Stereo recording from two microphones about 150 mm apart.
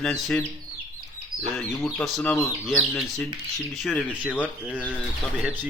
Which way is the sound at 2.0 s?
5° left (ahead or behind).